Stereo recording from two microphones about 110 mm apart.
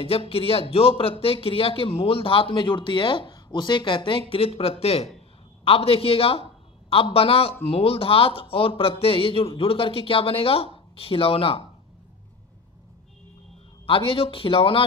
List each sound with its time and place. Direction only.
0.0 s speech: 60° left (ahead or behind)
13.8 s speech: 55° left (ahead or behind)